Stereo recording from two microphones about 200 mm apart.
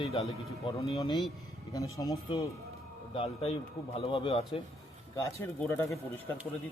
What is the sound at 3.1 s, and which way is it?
Speech, 30° left (ahead or behind).